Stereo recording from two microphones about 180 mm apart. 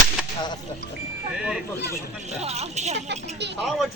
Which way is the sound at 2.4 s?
35° right (ahead or behind).